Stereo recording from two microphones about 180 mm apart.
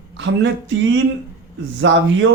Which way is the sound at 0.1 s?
80° right.